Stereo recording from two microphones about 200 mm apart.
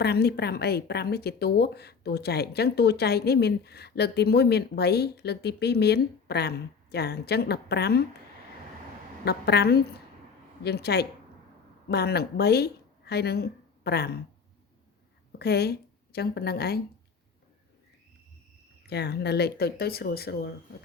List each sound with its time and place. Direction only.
0.0 s speech: 55° left (ahead or behind)
9.2 s a woman's voice: 55° left (ahead or behind)
15.3 s speech: 55° left (ahead or behind)
18.9 s speech: 55° left (ahead or behind)